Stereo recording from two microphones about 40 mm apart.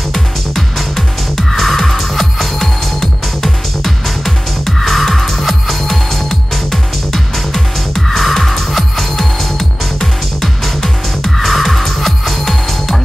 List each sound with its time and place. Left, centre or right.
0.1 s music: centre